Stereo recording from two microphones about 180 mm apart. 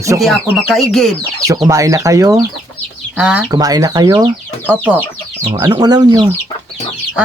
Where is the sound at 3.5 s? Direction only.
20° right (ahead or behind).